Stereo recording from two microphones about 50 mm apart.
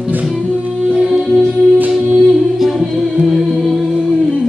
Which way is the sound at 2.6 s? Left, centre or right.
Centre.